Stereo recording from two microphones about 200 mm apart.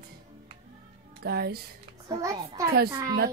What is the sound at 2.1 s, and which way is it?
A child's voice, 15° right (ahead or behind).